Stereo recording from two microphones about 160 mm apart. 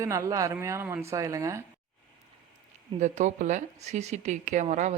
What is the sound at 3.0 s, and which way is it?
Speech, 50° right (ahead or behind).